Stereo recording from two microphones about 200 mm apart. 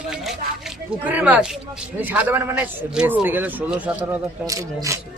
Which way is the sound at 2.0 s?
10° right (ahead or behind).